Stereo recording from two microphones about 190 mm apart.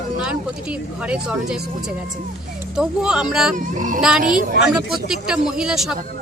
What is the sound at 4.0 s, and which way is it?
Speech, 5° right (ahead or behind).